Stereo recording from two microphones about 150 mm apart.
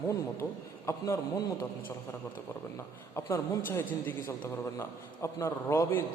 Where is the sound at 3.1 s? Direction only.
15° left (ahead or behind).